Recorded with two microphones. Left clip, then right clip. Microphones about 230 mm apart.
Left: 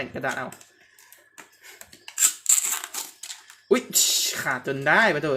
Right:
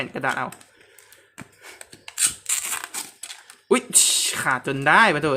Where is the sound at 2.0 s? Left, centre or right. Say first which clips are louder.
Left 2 dB; centre.